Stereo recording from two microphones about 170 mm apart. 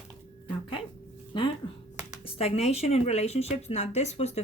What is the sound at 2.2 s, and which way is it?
Speech, 35° left (ahead or behind).